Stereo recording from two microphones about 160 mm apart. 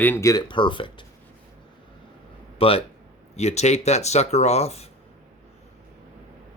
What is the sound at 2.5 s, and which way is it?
Speech, 35° left (ahead or behind).